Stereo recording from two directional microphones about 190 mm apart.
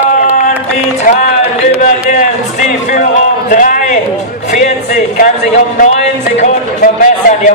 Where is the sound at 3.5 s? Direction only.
45° left (ahead or behind).